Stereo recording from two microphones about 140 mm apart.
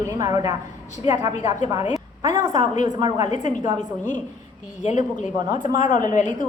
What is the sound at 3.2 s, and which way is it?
Speech, 55° left (ahead or behind).